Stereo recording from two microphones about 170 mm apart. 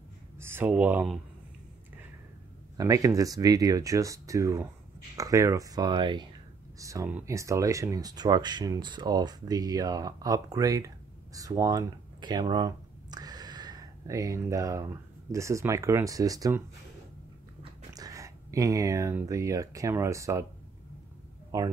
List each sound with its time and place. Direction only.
0.4 s speech: 15° right (ahead or behind)
2.8 s speech: 20° right (ahead or behind)
17.9 s speech: 20° right (ahead or behind)
21.5 s speech: 20° right (ahead or behind)